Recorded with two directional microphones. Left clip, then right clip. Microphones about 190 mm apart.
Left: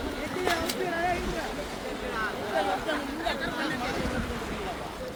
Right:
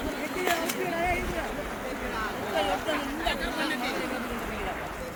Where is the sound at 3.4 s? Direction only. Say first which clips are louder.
Right 1 dB; 40° right (ahead or behind).